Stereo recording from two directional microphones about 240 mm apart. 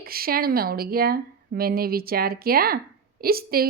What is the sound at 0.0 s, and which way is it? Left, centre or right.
A woman's voice, right.